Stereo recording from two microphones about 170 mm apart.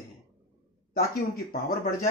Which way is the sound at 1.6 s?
60° left (ahead or behind).